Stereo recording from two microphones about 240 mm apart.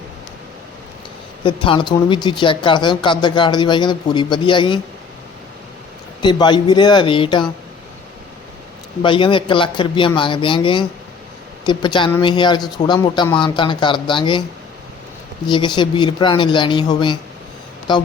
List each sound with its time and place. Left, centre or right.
1.5 s speech: left
6.2 s speech: centre
9.0 s speech: left
15.4 s speech: centre